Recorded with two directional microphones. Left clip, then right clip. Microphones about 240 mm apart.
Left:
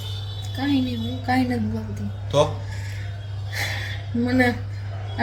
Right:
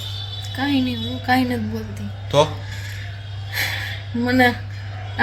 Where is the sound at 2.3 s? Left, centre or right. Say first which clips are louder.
Right 3 dB; right.